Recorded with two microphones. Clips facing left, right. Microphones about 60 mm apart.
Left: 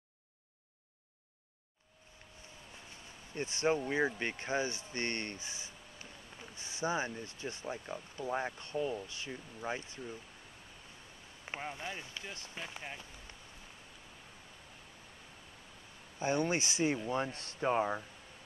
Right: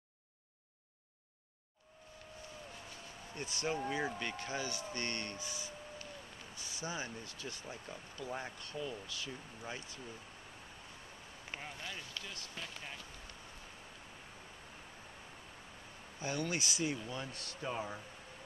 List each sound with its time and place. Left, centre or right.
2.9 s a sound: left
4.2 s speech: left
4.9 s a sound: left
6.5 s speech: left
11.4 s speech: left
16.2 s speech: left